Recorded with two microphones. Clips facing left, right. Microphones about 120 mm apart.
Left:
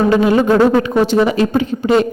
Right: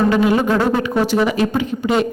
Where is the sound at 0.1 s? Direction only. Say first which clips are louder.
Left 3 dB; 30° left (ahead or behind).